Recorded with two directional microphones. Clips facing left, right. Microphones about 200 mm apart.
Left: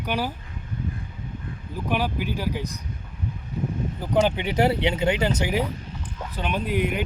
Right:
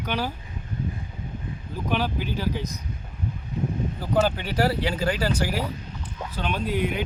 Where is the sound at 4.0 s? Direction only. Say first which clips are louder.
Left 2 dB; 20° left (ahead or behind).